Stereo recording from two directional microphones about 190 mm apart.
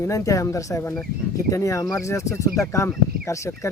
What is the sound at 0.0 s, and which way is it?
Speech, 15° left (ahead or behind).